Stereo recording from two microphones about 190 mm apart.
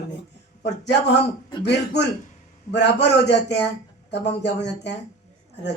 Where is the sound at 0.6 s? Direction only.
65° left (ahead or behind).